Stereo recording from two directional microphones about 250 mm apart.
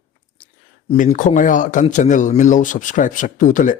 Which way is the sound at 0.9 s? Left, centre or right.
Left.